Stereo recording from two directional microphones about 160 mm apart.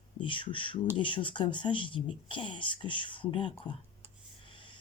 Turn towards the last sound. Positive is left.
turn(degrees=30)  # may be behind; listen again after turning